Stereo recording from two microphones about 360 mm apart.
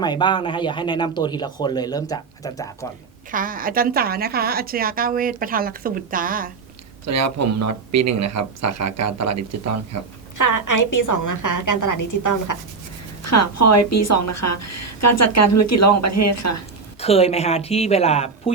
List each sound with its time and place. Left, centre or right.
0.0 s speech: centre
3.3 s a woman's voice: right
7.0 s speech: right
10.3 s a woman's voice: left
13.2 s a woman's voice: left
17.0 s speech: centre